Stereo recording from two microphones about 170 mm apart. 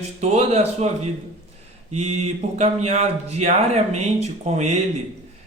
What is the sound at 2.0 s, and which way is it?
Speech, 40° right (ahead or behind).